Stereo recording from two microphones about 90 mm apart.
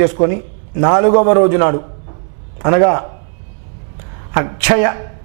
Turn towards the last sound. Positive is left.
turn(degrees=-15)  # may be behind; listen again after turning